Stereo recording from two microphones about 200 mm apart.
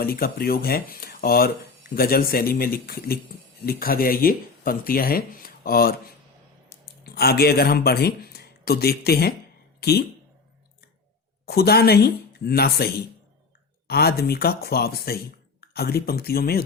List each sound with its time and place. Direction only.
0.0 s speech: 50° left (ahead or behind)
11.4 s speech: 50° left (ahead or behind)